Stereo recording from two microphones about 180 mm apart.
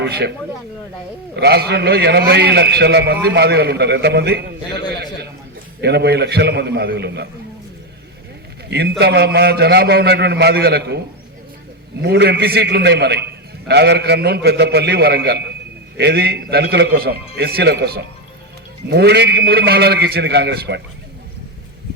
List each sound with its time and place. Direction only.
0.0 s speech: 65° right (ahead or behind)
1.4 s a man's voice: 65° right (ahead or behind)
4.9 s a sound: 65° right (ahead or behind)
5.8 s a man's voice: 65° right (ahead or behind)
8.7 s a man's voice: 65° right (ahead or behind)
12.0 s a man's voice: 70° right (ahead or behind)